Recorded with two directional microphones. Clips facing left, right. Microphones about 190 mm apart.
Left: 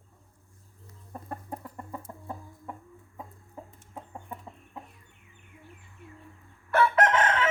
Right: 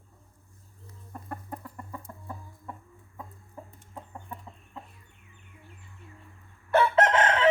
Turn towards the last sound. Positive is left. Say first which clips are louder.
# right 2 dB
turn(degrees=-30)  # may be behind; listen again after turning